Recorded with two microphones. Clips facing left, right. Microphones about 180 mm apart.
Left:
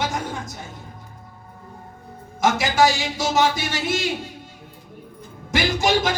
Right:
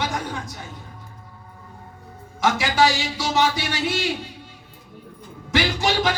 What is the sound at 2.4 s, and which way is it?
Speech, 45° left (ahead or behind).